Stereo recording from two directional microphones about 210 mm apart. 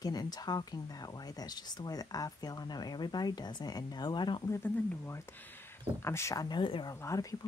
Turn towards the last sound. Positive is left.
turn(degrees=15)  # may be behind; listen again after turning